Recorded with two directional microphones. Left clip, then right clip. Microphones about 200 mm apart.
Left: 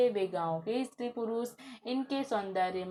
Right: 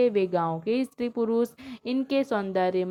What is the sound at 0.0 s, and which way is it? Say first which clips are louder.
Speech: right 6 dB; 40° right (ahead or behind).